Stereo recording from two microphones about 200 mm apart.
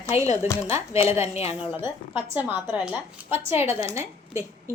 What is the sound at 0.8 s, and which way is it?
Speech, 30° left (ahead or behind).